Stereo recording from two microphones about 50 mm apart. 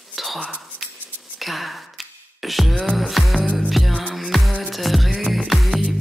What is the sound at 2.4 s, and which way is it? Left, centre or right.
Music, centre.